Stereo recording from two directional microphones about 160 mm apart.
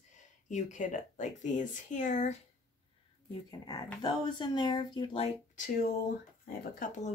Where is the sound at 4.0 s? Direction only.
25° left (ahead or behind).